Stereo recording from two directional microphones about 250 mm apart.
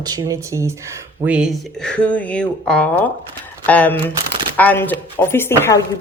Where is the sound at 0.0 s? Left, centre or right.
Centre.